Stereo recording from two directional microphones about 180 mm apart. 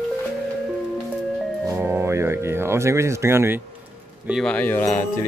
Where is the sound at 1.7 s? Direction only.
15° right (ahead or behind).